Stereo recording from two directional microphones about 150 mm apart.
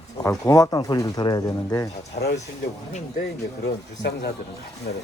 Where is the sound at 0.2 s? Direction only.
20° left (ahead or behind).